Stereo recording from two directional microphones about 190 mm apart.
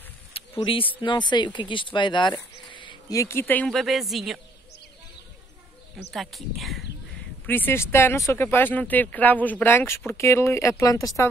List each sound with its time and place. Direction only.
0.6 s speech: 30° left (ahead or behind); by 4.4 s centre (ahead or behind)
6.1 s speech: centre (ahead or behind)
7.4 s speech: 10° left (ahead or behind)